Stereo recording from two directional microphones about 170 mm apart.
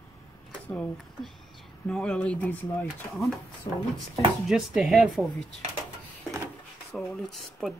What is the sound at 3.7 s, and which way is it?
Speech, 30° left (ahead or behind).